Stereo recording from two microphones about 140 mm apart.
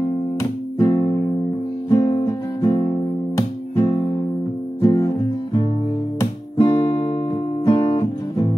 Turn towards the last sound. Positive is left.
turn(degrees=40)  # may be behind; listen again after turning